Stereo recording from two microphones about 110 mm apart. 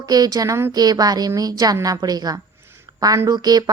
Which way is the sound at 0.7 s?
35° right (ahead or behind).